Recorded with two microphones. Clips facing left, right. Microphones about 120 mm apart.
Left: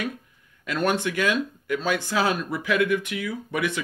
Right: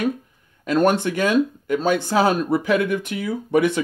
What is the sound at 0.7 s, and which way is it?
Speech, 35° right (ahead or behind).